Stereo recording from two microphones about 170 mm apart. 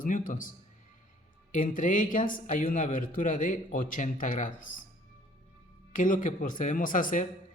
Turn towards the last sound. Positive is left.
turn(degrees=50)  # may be behind; listen again after turning